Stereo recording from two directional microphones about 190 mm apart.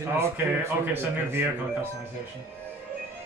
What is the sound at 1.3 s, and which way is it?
Speech, 10° right (ahead or behind).